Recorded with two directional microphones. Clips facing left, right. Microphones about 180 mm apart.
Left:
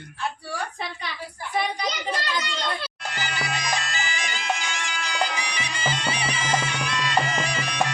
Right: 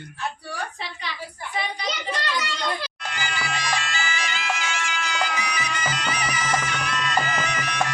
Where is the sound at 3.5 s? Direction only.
40° left (ahead or behind).